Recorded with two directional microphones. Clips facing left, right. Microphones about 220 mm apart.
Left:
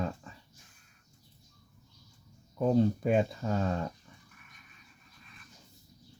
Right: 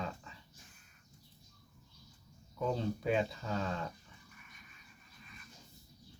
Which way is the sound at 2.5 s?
45° left (ahead or behind).